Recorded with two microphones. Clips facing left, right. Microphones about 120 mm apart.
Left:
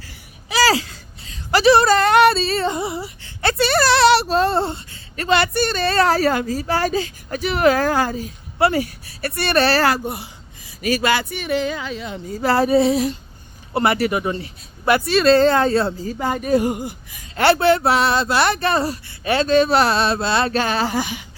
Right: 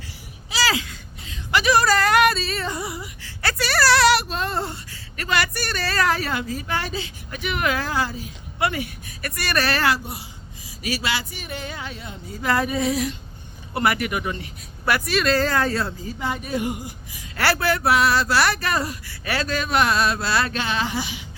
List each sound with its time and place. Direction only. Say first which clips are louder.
0.6 s speech: left 6 dB; 35° left (ahead or behind); by 12.2 s 90° left
12.4 s a sound: left 7 dB; 35° left (ahead or behind)
13.7 s speech: left 4 dB; 30° left (ahead or behind)
16.0 s speech: left 7 dB; 45° left (ahead or behind)
17.3 s speech: left 7 dB; 25° left (ahead or behind)
20.5 s speech: left 5 dB; 40° left (ahead or behind)